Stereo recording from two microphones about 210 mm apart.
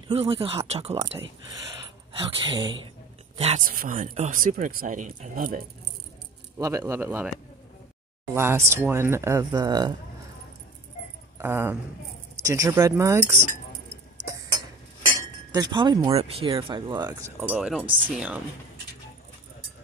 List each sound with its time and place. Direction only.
0.1 s speech: 25° right (ahead or behind)
2.1 s speech: 25° right (ahead or behind); by 5.6 s 40° right (ahead or behind)
6.6 s speech: 15° right (ahead or behind)
8.4 s speech: 10° right (ahead or behind)
11.3 s speech: 10° right (ahead or behind)
15.0 s chink: 20° right (ahead or behind)
16.2 s speech: 30° right (ahead or behind)
17.1 s speech: 5° right (ahead or behind)